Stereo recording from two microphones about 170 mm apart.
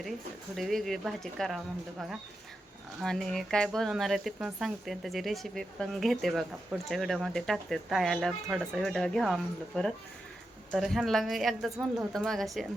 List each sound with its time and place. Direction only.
0.5 s speech: centre (ahead or behind)